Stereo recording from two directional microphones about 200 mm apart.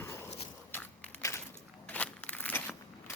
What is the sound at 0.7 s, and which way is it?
Walk, 10° left (ahead or behind).